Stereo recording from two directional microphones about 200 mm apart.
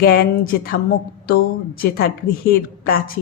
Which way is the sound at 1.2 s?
45° left (ahead or behind).